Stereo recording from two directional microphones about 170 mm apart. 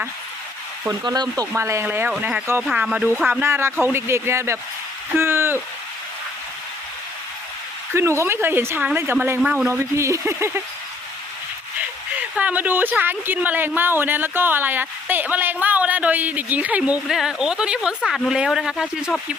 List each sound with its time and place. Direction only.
0.9 s speech: 25° right (ahead or behind)
7.9 s a man's voice: 15° right (ahead or behind)
9.6 s speech: 15° right (ahead or behind)
12.4 s speech: 10° right (ahead or behind)